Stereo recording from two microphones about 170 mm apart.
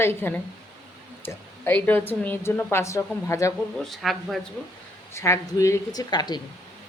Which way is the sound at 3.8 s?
Centre (ahead or behind).